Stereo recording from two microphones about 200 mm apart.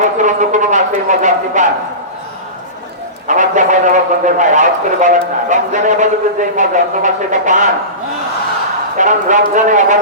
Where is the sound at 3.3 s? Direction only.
40° right (ahead or behind).